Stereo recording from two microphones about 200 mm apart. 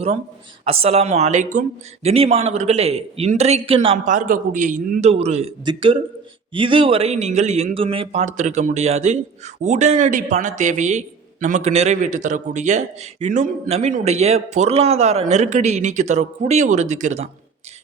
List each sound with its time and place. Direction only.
0.6 s a man's voice: 30° right (ahead or behind)